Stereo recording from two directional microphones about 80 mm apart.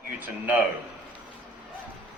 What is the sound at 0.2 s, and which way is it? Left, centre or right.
Speech, right.